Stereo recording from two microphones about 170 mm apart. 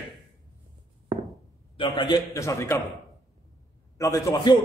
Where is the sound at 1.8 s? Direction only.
25° left (ahead or behind).